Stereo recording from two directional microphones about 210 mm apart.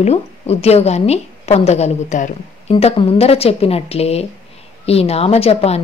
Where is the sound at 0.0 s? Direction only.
30° left (ahead or behind).